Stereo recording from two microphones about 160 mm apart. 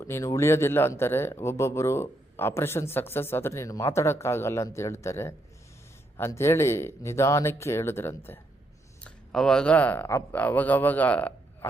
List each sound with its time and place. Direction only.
0.0 s speech: 20° left (ahead or behind)